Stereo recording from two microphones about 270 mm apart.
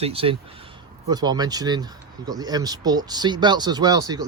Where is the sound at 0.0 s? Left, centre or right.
Right.